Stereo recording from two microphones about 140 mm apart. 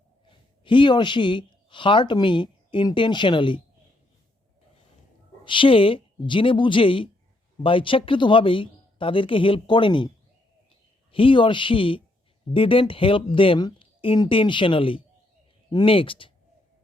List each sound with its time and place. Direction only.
0.3 s speech: 35° left (ahead or behind)
5.5 s speech: 35° left (ahead or behind)
11.1 s speech: 40° left (ahead or behind)